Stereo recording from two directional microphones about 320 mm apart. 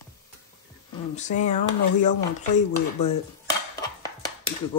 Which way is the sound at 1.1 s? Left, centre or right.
Left.